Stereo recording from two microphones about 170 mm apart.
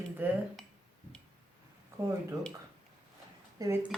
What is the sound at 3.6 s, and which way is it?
Speech, 20° right (ahead or behind).